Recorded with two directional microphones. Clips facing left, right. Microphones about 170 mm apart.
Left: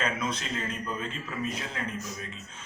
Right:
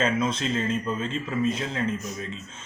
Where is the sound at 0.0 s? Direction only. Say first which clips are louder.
Right 7 dB; 25° right (ahead or behind).